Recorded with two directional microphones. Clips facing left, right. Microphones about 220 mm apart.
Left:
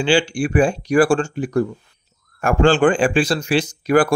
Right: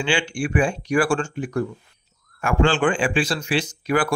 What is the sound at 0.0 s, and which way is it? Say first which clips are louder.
Speech: left 6 dB; 35° left (ahead or behind).